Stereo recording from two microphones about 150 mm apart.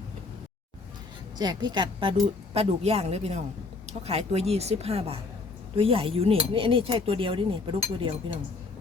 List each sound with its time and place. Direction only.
1.4 s a woman's voice: 30° right (ahead or behind)